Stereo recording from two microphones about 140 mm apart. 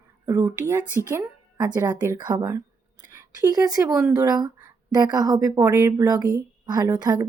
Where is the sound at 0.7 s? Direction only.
15° right (ahead or behind).